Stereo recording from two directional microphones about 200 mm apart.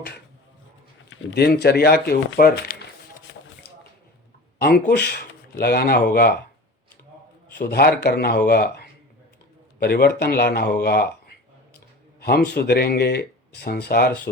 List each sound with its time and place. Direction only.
1.1 s speech: 65° left (ahead or behind)
3.3 s a sound: 55° left (ahead or behind)
4.5 s speech: 50° left (ahead or behind)
7.4 s speech: 55° left (ahead or behind)